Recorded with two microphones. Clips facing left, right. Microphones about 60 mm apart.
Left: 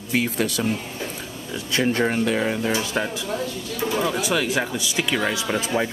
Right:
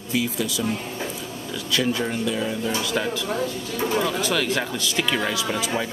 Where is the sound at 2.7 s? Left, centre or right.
Centre.